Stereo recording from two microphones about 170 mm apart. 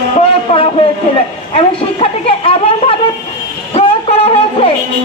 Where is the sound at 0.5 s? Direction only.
35° left (ahead or behind).